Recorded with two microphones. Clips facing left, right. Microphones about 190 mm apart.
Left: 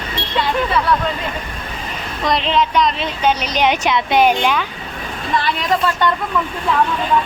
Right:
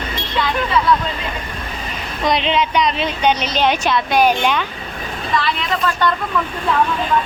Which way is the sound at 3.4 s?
15° left (ahead or behind).